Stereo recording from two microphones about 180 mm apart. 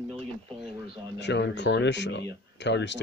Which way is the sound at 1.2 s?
70° left (ahead or behind).